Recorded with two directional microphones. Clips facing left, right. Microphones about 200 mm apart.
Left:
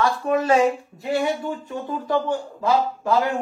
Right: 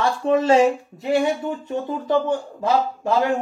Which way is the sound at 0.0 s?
25° right (ahead or behind).